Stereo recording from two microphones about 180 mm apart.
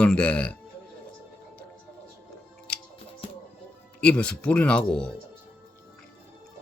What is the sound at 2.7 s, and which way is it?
Music, 5° left (ahead or behind).